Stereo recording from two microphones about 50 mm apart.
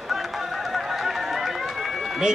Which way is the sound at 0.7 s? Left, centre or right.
Centre.